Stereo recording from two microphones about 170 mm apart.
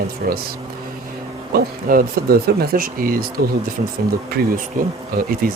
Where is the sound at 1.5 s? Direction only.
65° right (ahead or behind).